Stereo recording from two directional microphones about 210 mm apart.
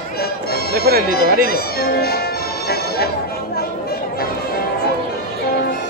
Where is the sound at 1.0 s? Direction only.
45° left (ahead or behind).